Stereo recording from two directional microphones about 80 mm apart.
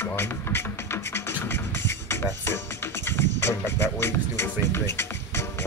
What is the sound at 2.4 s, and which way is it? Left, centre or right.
Music, left.